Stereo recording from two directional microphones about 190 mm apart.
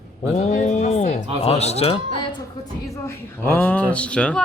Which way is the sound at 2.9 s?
15° left (ahead or behind).